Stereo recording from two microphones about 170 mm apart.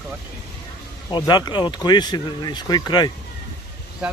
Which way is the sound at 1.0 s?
25° left (ahead or behind).